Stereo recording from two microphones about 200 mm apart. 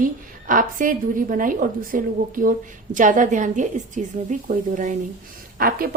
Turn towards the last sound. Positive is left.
turn(degrees=-45)  # may be behind; listen again after turning